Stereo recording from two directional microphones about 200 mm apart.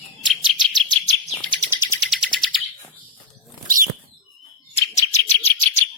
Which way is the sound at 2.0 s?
Centre (ahead or behind).